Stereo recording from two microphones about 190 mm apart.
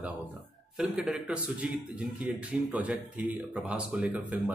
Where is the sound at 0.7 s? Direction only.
5° right (ahead or behind).